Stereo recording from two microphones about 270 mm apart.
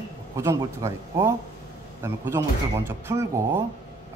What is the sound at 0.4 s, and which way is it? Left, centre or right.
A man's voice, centre.